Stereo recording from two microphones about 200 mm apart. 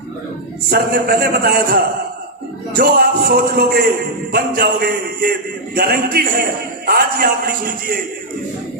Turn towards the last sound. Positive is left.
turn(degrees=-45)  # may be behind; listen again after turning